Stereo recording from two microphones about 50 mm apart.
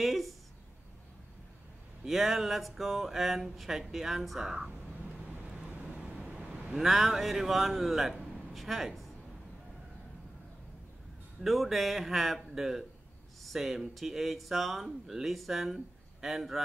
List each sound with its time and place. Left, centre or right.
0.0 s speech: centre
2.0 s speech: centre
4.6 s vehicle: centre
6.1 s vehicle: centre
6.8 s a man's voice: centre
11.4 s speech: centre